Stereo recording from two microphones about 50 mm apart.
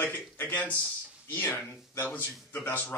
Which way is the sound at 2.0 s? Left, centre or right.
Left.